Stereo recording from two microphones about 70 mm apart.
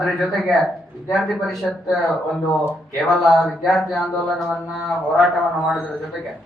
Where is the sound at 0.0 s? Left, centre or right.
Centre.